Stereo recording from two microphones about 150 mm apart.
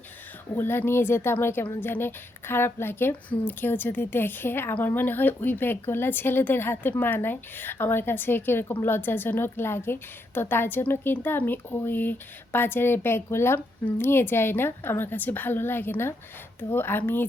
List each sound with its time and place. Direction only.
0.5 s speech: 15° left (ahead or behind)